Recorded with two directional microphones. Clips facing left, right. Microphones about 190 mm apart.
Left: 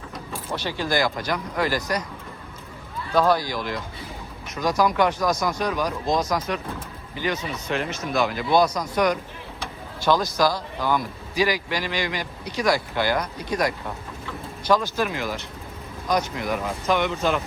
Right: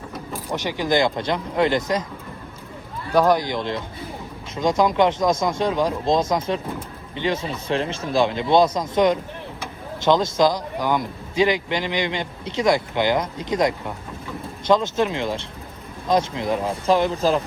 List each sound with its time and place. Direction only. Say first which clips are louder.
0.5 s a man's voice: right 4 dB; 15° right (ahead or behind)
3.1 s a man's voice: right 3 dB; 15° right (ahead or behind); by 17.4 s 35° right (ahead or behind)